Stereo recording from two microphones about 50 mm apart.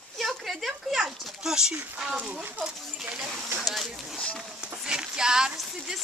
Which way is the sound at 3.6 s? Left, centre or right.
Centre.